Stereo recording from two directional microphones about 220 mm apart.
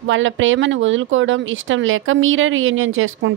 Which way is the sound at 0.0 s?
60° right (ahead or behind).